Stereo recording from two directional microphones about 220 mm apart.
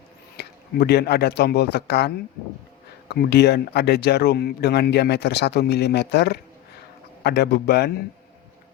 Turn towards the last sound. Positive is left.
turn(degrees=45)  # may be behind; listen again after turning